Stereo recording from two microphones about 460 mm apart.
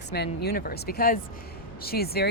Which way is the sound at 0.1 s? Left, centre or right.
Left.